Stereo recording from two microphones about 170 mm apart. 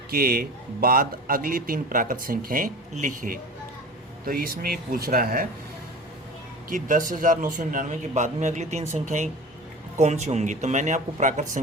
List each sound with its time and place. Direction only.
0.1 s a man's voice: 60° right (ahead or behind)
6.7 s a man's voice: 50° right (ahead or behind)